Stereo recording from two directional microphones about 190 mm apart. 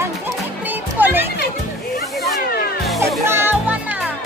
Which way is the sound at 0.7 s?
10° right (ahead or behind).